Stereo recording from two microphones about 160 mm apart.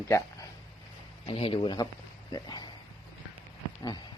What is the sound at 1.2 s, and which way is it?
Speech, 35° left (ahead or behind).